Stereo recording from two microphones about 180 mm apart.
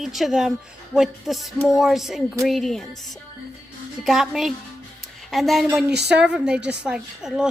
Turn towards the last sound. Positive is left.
turn(degrees=-5)  # may be behind; listen again after turning